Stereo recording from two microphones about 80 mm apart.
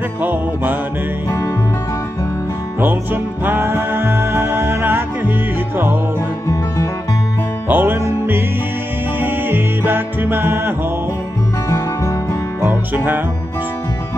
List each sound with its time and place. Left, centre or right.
0.2 s music: right
2.8 s music: right
6.4 s music: left
7.6 s music: right
9.2 s music: right
11.7 s music: left
12.6 s music: right